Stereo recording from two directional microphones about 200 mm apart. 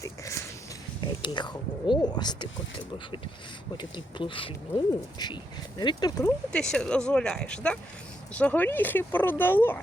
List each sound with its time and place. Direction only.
0.0 s a sound: 15° left (ahead or behind)
1.0 s speech: 25° left (ahead or behind)
6.5 s speech: 5° left (ahead or behind)